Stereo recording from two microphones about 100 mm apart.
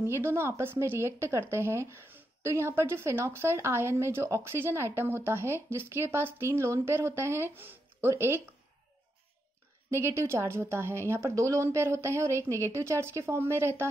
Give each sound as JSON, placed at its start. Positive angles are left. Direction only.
{"t": 0.0, "sound": "speech", "side_deg": -25}
{"t": 9.8, "sound": "speech", "side_deg": -25}